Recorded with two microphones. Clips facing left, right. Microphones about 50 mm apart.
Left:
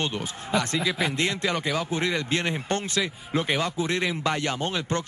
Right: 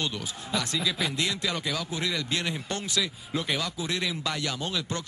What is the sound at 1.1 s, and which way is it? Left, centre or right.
Speech, left.